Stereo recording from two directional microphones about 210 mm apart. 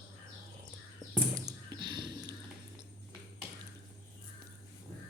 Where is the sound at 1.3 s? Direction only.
20° right (ahead or behind).